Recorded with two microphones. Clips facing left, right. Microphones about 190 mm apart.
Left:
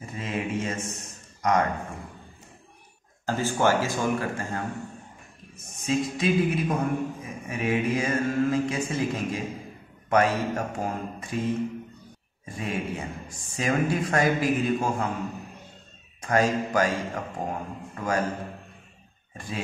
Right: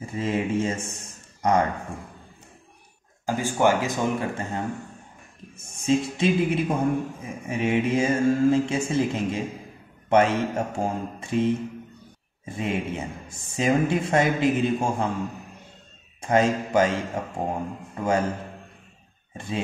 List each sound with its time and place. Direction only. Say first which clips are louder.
0.0 s speech: right 5 dB; 30° right (ahead or behind)
3.3 s speech: right 2 dB; 15° right (ahead or behind)
5.8 s speech: right 4 dB; 25° right (ahead or behind)
12.4 s speech: right 3 dB; 25° right (ahead or behind)
16.2 s speech: right 2 dB; 25° right (ahead or behind)
19.3 s speech: right 4 dB; 25° right (ahead or behind)